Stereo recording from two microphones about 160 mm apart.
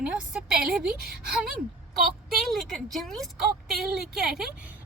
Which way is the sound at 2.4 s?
Centre (ahead or behind).